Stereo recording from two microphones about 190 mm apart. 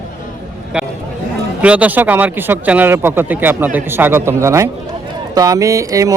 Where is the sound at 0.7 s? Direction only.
5° right (ahead or behind).